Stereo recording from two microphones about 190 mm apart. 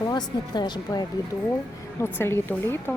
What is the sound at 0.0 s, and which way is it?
A woman's voice, 20° left (ahead or behind).